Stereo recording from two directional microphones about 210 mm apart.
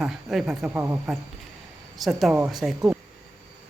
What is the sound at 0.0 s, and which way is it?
Speech, centre (ahead or behind).